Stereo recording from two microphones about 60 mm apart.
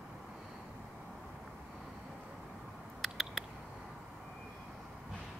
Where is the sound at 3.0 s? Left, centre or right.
Centre.